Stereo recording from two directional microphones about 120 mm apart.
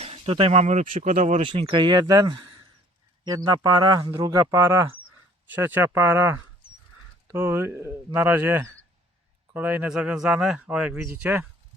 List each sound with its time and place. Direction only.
0.0 s speech: 55° right (ahead or behind); by 1.4 s 90° right
1.4 s speech: 50° right (ahead or behind); by 6.3 s 15° right (ahead or behind)
7.3 s speech: 20° right (ahead or behind)